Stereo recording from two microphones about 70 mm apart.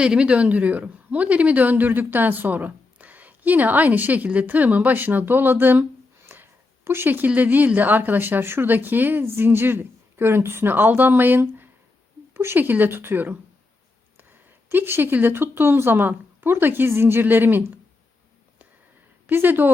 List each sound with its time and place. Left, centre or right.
0.0 s speech: centre
6.2 s a sound: right
7.3 s speech: right
14.7 s speech: right
19.3 s speech: right